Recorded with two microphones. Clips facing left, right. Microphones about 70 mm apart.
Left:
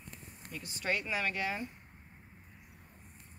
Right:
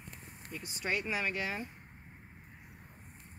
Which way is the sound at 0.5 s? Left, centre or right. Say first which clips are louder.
Even; centre.